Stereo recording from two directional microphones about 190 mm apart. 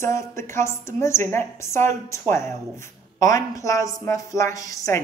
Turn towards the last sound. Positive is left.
turn(degrees=15)  # may be behind; listen again after turning